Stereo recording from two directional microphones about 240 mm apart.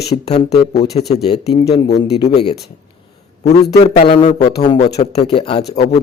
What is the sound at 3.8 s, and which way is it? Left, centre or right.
A man's voice, left.